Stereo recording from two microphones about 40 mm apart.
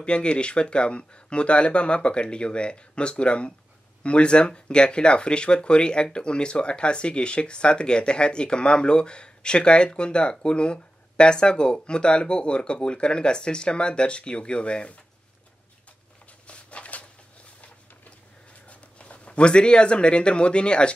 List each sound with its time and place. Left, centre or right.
0.0 s speech: left
16.4 s a sound: left
18.7 s speech: left